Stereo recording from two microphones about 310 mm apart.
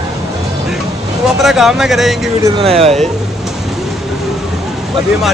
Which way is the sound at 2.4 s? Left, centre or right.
Centre.